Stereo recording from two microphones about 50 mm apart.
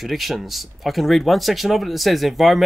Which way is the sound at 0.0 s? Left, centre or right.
Centre.